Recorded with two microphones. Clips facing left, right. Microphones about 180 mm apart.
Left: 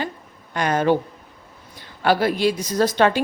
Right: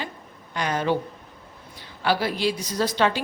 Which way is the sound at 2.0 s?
50° left (ahead or behind).